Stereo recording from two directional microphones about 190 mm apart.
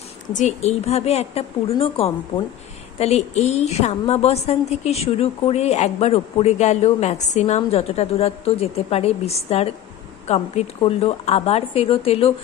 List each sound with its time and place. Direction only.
0.3 s a woman's voice: 35° left (ahead or behind)